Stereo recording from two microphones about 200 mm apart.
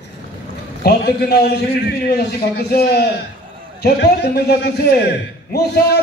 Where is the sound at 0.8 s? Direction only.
55° left (ahead or behind).